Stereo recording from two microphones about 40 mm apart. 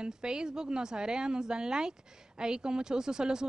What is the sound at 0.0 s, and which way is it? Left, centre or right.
A woman's voice, centre.